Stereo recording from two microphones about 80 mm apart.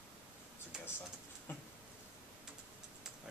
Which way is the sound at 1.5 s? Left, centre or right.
Left.